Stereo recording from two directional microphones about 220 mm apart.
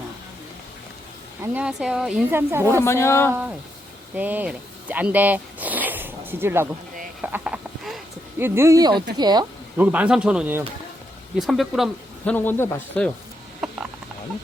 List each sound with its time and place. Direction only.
1.4 s speech: 5° right (ahead or behind)
2.8 s speech: 10° left (ahead or behind)
4.1 s speech: 5° right (ahead or behind)
7.2 s a sound: 5° right (ahead or behind)
9.1 s speech: 20° right (ahead or behind)
9.7 s speech: 5° right (ahead or behind); by 13.1 s 10° left (ahead or behind)
13.6 s a sound: centre (ahead or behind)